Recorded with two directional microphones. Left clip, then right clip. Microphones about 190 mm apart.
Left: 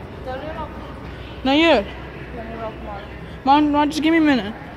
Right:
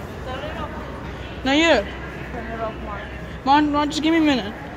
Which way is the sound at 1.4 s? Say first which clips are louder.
Left 1 dB; 45° left (ahead or behind).